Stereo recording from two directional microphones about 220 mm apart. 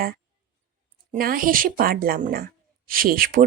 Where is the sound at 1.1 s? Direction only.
40° right (ahead or behind).